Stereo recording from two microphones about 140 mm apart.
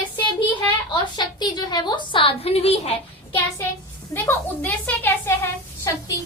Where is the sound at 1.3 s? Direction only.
30° left (ahead or behind); by 2.9 s 50° left (ahead or behind).